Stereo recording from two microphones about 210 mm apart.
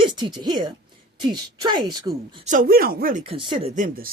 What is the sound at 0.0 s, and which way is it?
A woman's voice, 20° right (ahead or behind).